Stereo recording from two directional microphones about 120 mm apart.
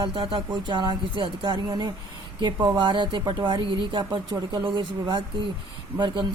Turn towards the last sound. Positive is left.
turn(degrees=-40)  # may be behind; listen again after turning